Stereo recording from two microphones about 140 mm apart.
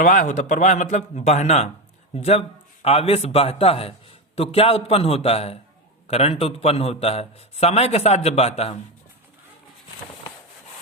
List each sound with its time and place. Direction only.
0.0 s a man's voice: 65° left (ahead or behind); by 8.8 s 45° left (ahead or behind)